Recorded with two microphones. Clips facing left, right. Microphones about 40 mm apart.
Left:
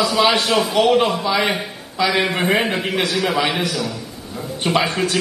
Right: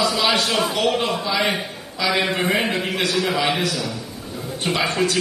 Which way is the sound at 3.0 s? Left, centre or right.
Left.